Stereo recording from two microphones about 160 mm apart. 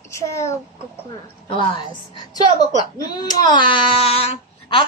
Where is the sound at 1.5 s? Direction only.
30° left (ahead or behind).